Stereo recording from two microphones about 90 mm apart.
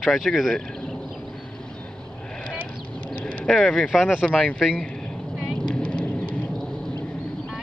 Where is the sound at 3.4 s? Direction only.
5° left (ahead or behind).